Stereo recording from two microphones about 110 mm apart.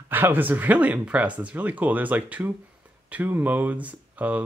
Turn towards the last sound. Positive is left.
turn(degrees=-15)  # may be behind; listen again after turning